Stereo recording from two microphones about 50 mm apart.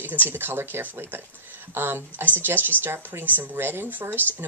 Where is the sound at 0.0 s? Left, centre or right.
Right.